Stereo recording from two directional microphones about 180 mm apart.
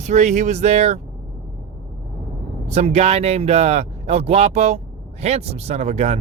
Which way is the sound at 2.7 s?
35° right (ahead or behind).